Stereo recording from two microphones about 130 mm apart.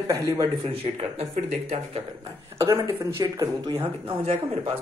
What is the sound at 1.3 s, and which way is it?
Speech, 75° right (ahead or behind).